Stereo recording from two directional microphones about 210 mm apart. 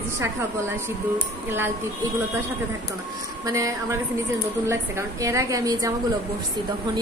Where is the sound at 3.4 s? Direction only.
15° right (ahead or behind).